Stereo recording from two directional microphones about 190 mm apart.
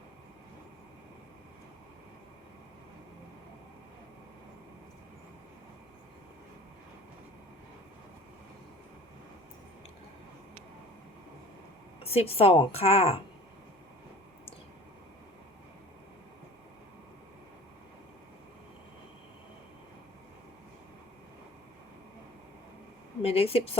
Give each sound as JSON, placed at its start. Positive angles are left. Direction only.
{"t": 12.0, "sound": "a woman's voice", "side_deg": 30}
{"t": 23.2, "sound": "a woman's voice", "side_deg": 30}